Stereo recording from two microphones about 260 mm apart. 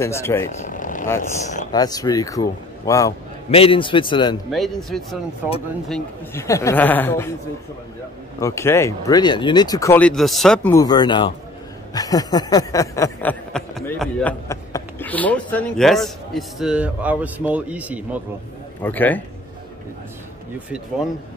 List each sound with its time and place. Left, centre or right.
0.0 s speech: centre
0.7 s vehicle: left
1.7 s speech: centre
4.5 s a sound: centre
5.9 s speech: centre
8.4 s speech: centre
11.9 s a sound: centre
18.8 s speech: centre